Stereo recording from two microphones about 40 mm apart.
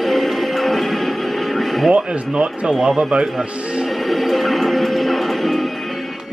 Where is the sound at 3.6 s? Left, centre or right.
Right.